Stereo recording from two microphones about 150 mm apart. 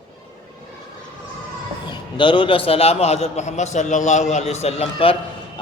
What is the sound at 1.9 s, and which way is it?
A man's voice, 35° left (ahead or behind).